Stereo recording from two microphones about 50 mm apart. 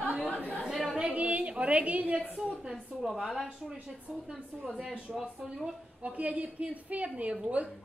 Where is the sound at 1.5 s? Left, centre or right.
Right.